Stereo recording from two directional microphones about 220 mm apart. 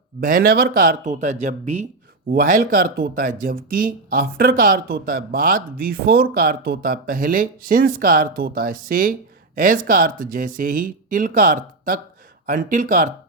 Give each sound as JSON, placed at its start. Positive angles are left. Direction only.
{"t": 0.2, "sound": "speech", "side_deg": -40}